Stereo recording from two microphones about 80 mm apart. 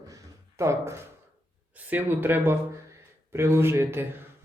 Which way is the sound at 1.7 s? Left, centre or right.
Right.